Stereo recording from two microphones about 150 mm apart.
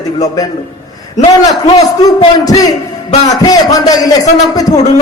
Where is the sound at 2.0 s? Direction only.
25° left (ahead or behind).